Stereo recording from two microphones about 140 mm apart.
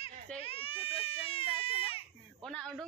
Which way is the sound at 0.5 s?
40° left (ahead or behind).